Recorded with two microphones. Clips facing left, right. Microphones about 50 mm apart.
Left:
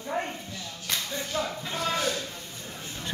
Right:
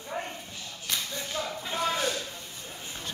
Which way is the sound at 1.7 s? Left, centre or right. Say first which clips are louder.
Right 2 dB; centre.